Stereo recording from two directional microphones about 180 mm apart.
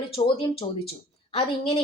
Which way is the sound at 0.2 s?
30° left (ahead or behind).